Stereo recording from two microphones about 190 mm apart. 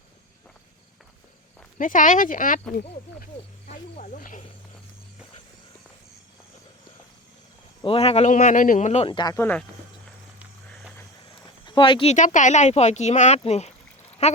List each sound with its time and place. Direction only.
1.8 s speech: 45° left (ahead or behind)
3.7 s speech: 40° left (ahead or behind)
7.9 s speech: 30° left (ahead or behind)
9.3 s speech: 10° left (ahead or behind)
11.6 s speech: 25° left (ahead or behind)
12.1 s speech: 40° left (ahead or behind)